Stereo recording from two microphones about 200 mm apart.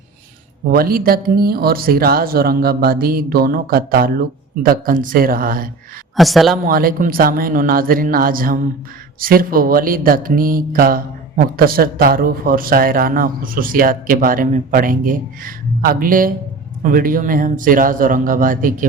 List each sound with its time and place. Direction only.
0.7 s speech: 45° right (ahead or behind)
6.1 s a man's voice: centre (ahead or behind)
6.7 s speech: 45° right (ahead or behind)